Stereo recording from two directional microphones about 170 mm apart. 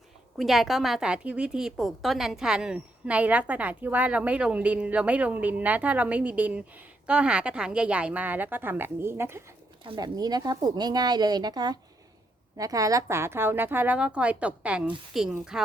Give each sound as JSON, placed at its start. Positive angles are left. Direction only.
{"t": 0.3, "sound": "a woman's voice", "side_deg": 0}
{"t": 9.8, "sound": "a woman's voice", "side_deg": -25}